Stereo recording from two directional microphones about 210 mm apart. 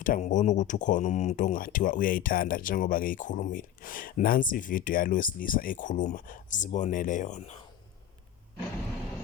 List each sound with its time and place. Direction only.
0.0 s speech: 35° left (ahead or behind)